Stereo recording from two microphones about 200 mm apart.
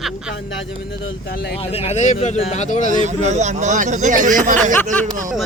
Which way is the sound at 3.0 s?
35° right (ahead or behind).